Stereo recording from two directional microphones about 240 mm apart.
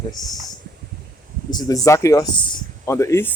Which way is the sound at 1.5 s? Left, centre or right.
Centre.